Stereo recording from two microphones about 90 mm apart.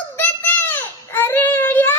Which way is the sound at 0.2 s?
20° left (ahead or behind).